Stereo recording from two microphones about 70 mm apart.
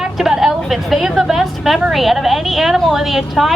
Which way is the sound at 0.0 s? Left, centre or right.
Centre.